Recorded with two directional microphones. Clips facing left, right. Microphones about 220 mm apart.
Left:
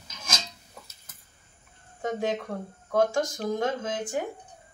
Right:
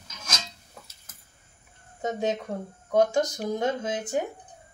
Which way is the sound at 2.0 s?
20° right (ahead or behind).